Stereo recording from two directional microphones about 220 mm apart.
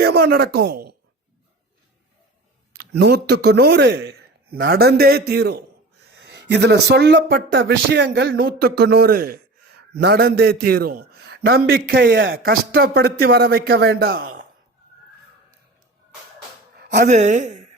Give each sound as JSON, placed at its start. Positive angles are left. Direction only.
{"t": 0.0, "sound": "speech", "side_deg": -45}
{"t": 2.7, "sound": "speech", "side_deg": -50}
{"t": 16.7, "sound": "a woman's voice", "side_deg": -40}